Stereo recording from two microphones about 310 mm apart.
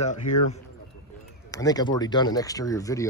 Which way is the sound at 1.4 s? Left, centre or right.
Centre.